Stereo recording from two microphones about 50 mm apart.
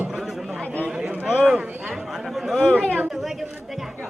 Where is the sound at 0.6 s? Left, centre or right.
Left.